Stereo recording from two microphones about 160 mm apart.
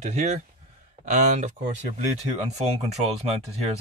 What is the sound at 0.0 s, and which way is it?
Speech, 45° right (ahead or behind).